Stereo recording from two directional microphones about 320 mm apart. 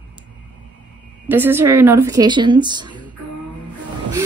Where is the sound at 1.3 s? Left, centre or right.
Centre.